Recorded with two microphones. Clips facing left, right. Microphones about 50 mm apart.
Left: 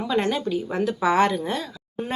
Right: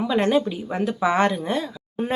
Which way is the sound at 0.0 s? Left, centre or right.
Centre.